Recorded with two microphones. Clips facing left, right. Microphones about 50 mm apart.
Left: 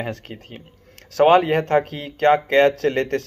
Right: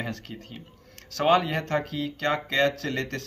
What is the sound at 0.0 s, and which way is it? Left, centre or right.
Speech, left.